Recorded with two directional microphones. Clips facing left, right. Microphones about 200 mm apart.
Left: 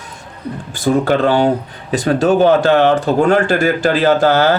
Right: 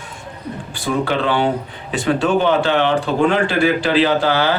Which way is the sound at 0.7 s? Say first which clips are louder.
Left 6 dB; 45° left (ahead or behind).